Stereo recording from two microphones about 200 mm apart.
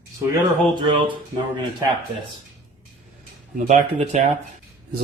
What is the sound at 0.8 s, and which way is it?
Speech, 25° right (ahead or behind).